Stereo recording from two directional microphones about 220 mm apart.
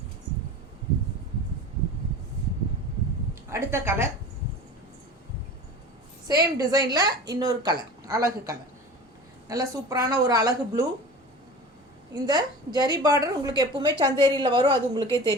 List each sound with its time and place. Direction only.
3.5 s a woman's voice: 10° right (ahead or behind)
6.2 s a woman's voice: 15° right (ahead or behind)
9.5 s a woman's voice: 15° right (ahead or behind)
12.1 s a woman's voice: 15° right (ahead or behind)